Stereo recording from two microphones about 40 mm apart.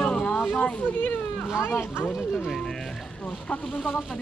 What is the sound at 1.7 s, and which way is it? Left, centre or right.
Speech, left.